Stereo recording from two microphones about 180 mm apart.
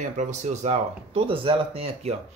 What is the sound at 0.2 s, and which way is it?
Speech, 40° right (ahead or behind).